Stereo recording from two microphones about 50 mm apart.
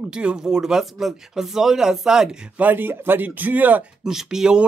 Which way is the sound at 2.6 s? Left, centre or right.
Right.